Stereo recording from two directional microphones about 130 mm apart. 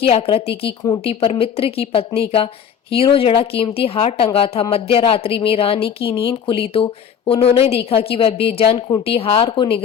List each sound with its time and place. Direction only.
0.0 s speech: 50° left (ahead or behind)